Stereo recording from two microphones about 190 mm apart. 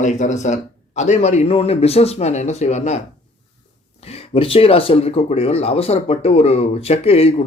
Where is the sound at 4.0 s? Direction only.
30° left (ahead or behind).